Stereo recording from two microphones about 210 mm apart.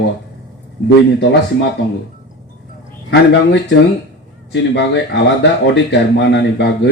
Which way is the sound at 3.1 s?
55° left (ahead or behind).